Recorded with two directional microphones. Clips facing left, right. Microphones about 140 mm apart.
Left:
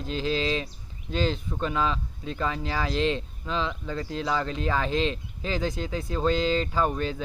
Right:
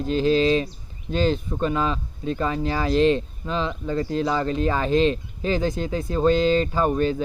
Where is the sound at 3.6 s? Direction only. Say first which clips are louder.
Right 6 dB; 15° right (ahead or behind).